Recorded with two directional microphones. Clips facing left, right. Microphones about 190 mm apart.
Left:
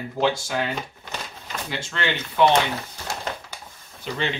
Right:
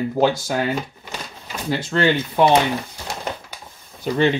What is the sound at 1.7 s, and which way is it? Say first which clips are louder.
Speech: right 10 dB; 40° right (ahead or behind).